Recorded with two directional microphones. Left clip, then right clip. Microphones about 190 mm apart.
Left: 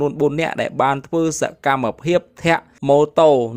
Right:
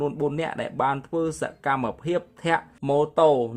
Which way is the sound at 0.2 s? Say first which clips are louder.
Left 8 dB; 35° left (ahead or behind).